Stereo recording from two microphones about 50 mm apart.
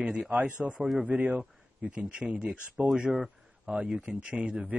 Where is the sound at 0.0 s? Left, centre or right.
Centre.